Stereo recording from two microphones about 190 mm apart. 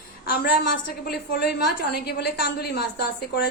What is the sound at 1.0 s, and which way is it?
A woman's voice, 60° left (ahead or behind).